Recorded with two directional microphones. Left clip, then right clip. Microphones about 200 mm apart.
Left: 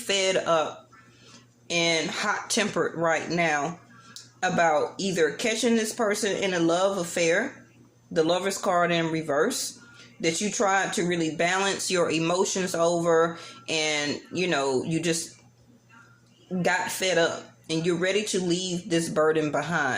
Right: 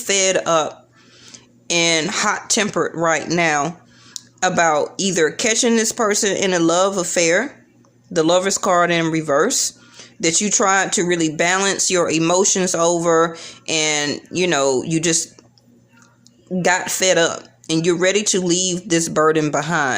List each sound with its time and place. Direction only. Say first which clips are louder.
0.0 s speech: right 7 dB; 40° right (ahead or behind)
16.6 s speech: right 8 dB; 45° right (ahead or behind)